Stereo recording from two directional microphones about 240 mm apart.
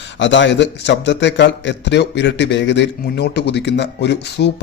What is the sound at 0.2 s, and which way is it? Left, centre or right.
A man's voice, left.